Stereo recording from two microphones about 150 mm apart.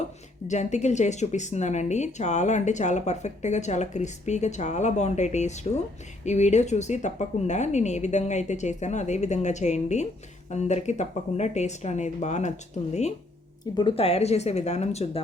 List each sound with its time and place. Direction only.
0.4 s speech: 50° left (ahead or behind)
13.7 s speech: 35° left (ahead or behind)